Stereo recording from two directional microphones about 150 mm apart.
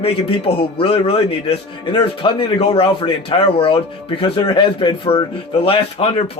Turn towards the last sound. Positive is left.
turn(degrees=40)  # may be behind; listen again after turning